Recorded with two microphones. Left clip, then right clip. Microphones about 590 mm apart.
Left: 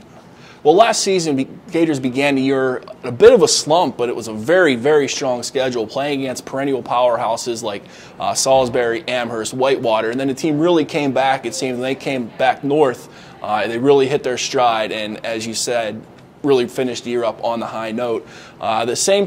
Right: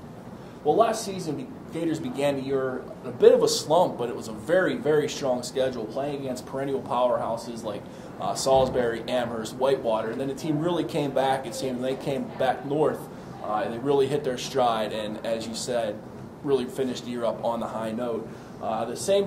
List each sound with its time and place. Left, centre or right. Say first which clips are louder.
0.7 s speech: left 10 dB; left
18.6 s a man's voice: left 11 dB; left